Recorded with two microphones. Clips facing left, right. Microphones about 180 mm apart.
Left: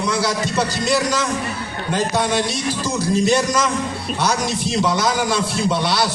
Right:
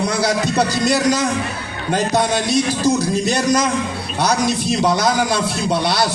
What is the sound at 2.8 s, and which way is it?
Speech, 40° right (ahead or behind).